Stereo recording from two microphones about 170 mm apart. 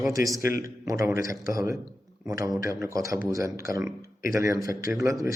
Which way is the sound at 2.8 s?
20° right (ahead or behind).